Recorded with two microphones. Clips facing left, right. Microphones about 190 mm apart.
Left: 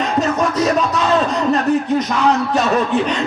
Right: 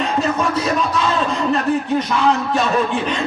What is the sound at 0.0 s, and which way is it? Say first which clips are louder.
Music: left 2 dB; 40° left (ahead or behind).